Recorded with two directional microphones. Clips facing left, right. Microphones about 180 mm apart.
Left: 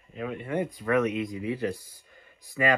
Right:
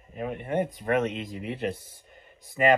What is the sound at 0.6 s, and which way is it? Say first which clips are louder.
Speech: left 4 dB; 25° right (ahead or behind).